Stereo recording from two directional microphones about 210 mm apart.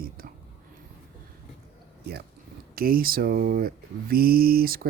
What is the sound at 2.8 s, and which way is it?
Mantra, 45° right (ahead or behind).